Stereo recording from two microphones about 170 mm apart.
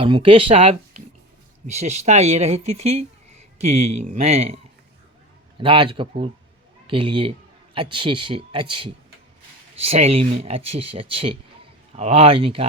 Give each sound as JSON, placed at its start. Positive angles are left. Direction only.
{"t": 0.0, "sound": "a man's voice", "side_deg": -30}